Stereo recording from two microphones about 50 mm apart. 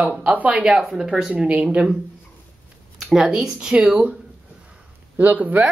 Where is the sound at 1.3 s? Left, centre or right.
Right.